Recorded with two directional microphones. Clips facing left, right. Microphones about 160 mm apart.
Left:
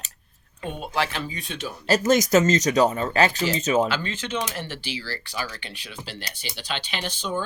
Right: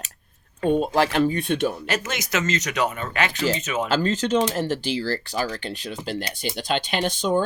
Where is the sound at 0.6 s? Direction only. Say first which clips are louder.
Right 8 dB; 40° right (ahead or behind); by 1.7 s 55° right (ahead or behind).